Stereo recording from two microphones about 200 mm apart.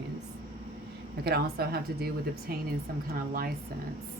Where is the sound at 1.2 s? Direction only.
50° right (ahead or behind).